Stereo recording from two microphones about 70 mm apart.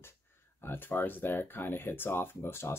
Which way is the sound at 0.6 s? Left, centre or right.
Left.